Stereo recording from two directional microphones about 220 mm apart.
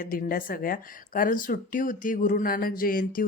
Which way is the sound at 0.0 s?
40° left (ahead or behind).